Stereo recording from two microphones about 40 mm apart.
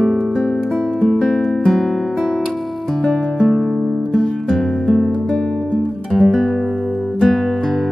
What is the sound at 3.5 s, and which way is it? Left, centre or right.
Music, centre.